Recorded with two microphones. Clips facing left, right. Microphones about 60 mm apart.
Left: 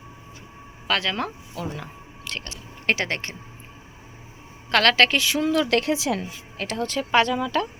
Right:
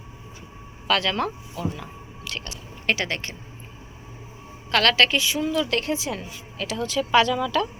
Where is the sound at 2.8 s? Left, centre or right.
Left.